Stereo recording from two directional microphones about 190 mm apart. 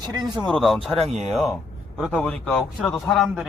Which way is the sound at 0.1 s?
25° right (ahead or behind).